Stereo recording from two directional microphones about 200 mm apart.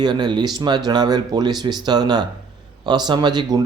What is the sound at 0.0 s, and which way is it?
Speech, 20° right (ahead or behind).